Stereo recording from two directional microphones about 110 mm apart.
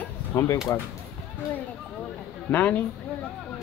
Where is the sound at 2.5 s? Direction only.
15° left (ahead or behind).